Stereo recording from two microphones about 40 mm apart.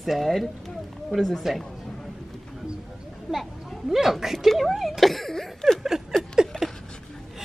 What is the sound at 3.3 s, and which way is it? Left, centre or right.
A child's voice, centre.